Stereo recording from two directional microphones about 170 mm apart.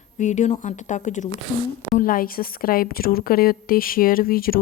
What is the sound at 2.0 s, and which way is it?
A woman's voice, 55° left (ahead or behind).